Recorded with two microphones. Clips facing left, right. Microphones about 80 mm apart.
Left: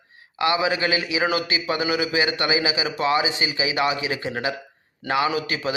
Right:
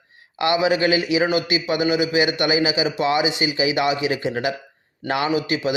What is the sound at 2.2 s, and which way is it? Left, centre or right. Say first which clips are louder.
Speech: right 3 dB; left.